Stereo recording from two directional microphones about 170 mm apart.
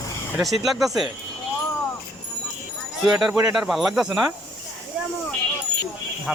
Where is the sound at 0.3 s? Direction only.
Centre (ahead or behind).